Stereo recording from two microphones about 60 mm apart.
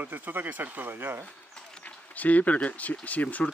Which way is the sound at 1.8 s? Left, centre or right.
Left.